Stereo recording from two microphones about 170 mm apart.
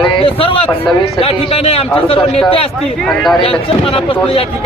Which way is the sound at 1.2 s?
35° left (ahead or behind).